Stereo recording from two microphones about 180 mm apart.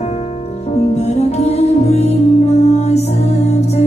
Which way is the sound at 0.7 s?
35° left (ahead or behind).